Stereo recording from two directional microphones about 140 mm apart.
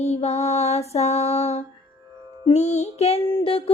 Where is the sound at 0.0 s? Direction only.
50° left (ahead or behind).